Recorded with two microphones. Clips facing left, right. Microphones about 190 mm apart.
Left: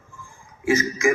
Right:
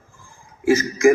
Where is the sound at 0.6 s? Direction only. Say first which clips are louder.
Right 5 dB; 35° right (ahead or behind).